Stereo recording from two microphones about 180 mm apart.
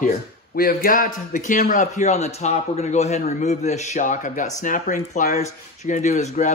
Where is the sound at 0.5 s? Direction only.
55° left (ahead or behind).